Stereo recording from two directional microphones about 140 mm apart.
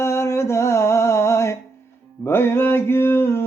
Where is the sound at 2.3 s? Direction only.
15° left (ahead or behind).